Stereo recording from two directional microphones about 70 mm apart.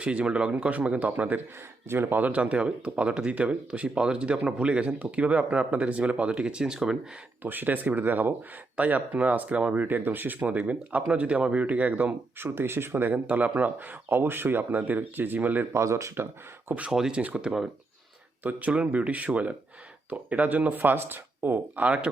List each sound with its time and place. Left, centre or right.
0.0 s speech: centre
7.4 s speech: right
12.4 s speech: right
15.7 s speech: right
16.6 s speech: centre
18.4 s speech: centre
21.8 s speech: centre